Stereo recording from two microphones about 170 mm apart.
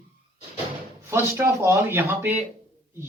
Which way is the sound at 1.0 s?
15° right (ahead or behind).